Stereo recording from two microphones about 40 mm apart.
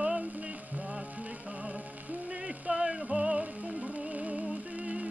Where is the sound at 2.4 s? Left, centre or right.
Right.